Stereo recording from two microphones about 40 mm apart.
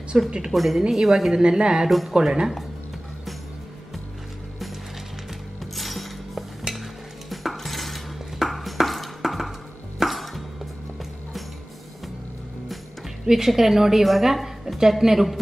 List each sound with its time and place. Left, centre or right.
0.1 s speech: centre
0.5 s a woman's voice: centre
1.3 s speech: right
1.9 s a woman's voice: centre
2.1 s speech: centre
5.6 s a sound: centre
6.7 s cutlery: centre
9.9 s music: centre
13.5 s a woman's voice: centre